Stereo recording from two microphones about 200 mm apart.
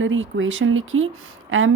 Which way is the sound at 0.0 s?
70° right (ahead or behind).